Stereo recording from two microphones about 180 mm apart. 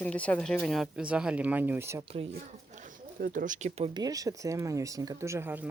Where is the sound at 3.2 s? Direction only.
50° right (ahead or behind).